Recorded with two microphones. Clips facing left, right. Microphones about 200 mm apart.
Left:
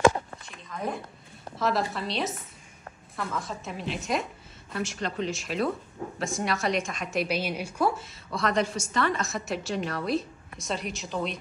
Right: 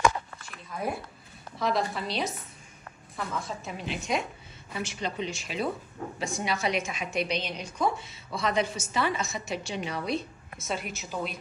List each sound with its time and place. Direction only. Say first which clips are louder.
0.0 s a sound: left 4 dB; 25° left (ahead or behind)
0.7 s speech: even; 10° right (ahead or behind)
1.6 s a woman's voice: left 1 dB; centre (ahead or behind)